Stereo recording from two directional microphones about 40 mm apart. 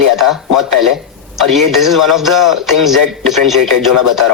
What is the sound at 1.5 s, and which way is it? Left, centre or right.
A man's voice, centre.